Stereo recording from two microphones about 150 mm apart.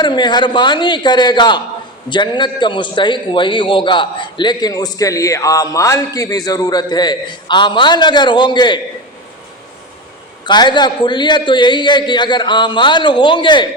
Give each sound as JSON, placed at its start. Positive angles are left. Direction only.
{"t": 0.0, "sound": "a man's voice", "side_deg": 30}
{"t": 10.4, "sound": "a man's voice", "side_deg": 30}